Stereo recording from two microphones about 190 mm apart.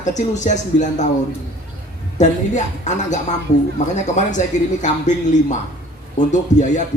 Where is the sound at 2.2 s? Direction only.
40° left (ahead or behind).